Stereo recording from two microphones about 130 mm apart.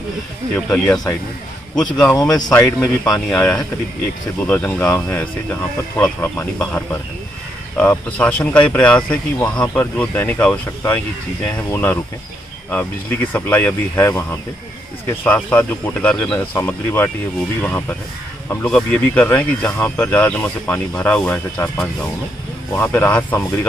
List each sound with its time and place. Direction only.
0.6 s speech: 10° left (ahead or behind)
22.7 s speech: 15° left (ahead or behind)